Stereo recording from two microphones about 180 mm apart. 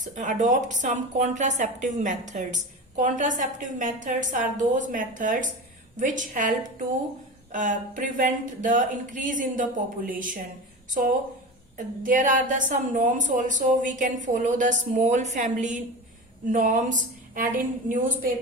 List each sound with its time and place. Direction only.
0.0 s a woman's voice: 45° right (ahead or behind)
12.0 s a woman's voice: 45° right (ahead or behind)